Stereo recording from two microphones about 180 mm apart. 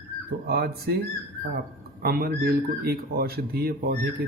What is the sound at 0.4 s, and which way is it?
Speech, 60° right (ahead or behind).